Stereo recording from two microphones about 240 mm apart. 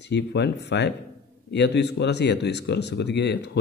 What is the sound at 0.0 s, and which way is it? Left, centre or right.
Speech, left.